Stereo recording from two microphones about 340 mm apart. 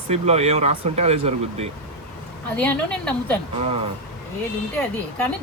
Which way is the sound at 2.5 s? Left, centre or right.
Centre.